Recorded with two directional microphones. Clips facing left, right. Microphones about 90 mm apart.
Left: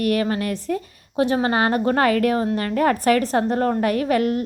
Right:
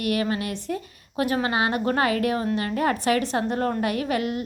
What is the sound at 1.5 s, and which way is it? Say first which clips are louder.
A woman's voice: left 4 dB; 40° left (ahead or behind).